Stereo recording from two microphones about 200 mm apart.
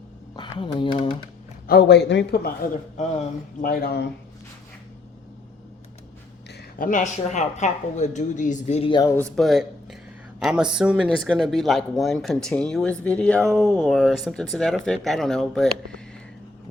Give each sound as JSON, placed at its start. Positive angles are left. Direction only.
{"t": 0.3, "sound": "speech", "side_deg": 25}
{"t": 1.6, "sound": "speech", "side_deg": 50}
{"t": 3.6, "sound": "speech", "side_deg": 45}
{"t": 6.5, "sound": "speech", "side_deg": 45}
{"t": 9.3, "sound": "speech", "side_deg": 0}